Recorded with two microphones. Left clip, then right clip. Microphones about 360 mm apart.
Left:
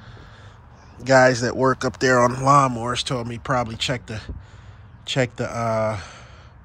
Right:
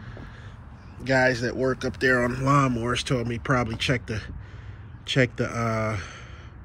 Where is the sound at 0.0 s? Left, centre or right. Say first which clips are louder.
Right 2 dB; centre.